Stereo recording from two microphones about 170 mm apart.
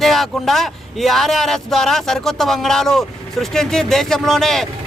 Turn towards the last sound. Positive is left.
turn(degrees=0)  # may be behind; listen again after turning